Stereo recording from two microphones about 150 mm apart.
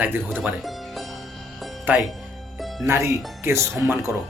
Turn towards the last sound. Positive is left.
turn(degrees=-15)  # may be behind; listen again after turning